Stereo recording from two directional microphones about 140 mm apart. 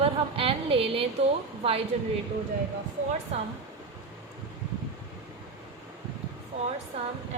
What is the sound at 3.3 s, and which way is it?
Speech, 45° right (ahead or behind).